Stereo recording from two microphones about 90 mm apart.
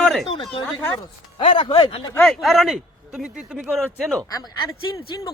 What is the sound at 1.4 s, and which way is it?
Speech, 75° left (ahead or behind).